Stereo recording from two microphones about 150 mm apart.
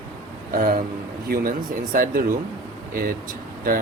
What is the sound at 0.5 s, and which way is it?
Speech, 75° right (ahead or behind).